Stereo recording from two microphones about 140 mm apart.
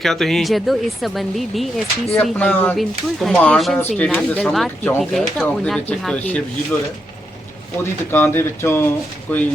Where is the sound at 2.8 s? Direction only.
Centre (ahead or behind).